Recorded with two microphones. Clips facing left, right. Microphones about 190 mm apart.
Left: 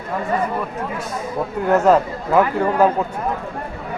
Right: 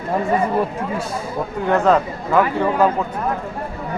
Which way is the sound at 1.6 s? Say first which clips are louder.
Left 1 dB; 5° left (ahead or behind).